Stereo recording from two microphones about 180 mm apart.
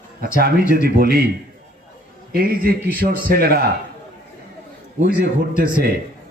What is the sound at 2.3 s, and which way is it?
A man's voice, 55° right (ahead or behind).